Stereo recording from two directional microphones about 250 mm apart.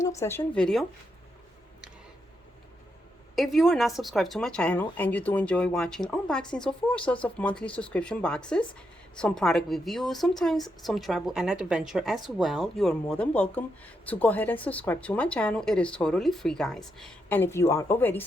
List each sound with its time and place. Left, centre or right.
0.0 s speech: centre
3.3 s a woman's voice: centre